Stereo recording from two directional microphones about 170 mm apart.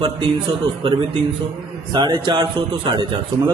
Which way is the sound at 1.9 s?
25° right (ahead or behind).